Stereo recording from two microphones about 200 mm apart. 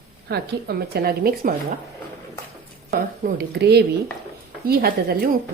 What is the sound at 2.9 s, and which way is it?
Speech, 50° right (ahead or behind).